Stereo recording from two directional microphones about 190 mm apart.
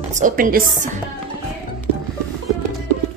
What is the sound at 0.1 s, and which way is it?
Speech, 45° right (ahead or behind).